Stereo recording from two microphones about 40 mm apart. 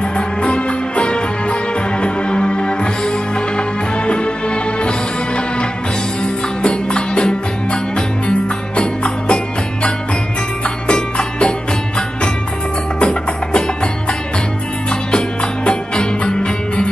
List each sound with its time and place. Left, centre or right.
0.4 s music: left
10.9 s music: left
13.0 s music: left
14.9 s music: left